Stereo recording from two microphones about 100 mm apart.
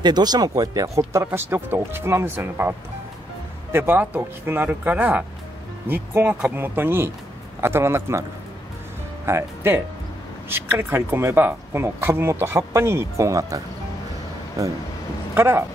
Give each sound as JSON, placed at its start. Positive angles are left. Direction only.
{"t": 0.0, "sound": "speech", "side_deg": -45}
{"t": 3.7, "sound": "speech", "side_deg": -20}